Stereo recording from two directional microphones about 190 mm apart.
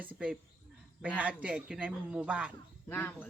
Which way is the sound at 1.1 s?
5° right (ahead or behind).